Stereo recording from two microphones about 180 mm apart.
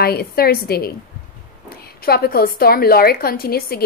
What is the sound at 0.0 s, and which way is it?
Speech, 60° left (ahead or behind).